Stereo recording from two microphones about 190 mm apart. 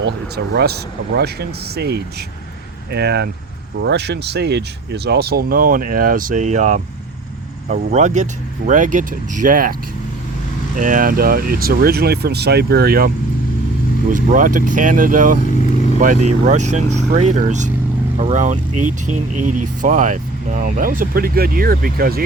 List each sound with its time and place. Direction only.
0.0 s speech: 60° right (ahead or behind)
10.8 s speech: 45° right (ahead or behind)
14.1 s speech: 45° right (ahead or behind)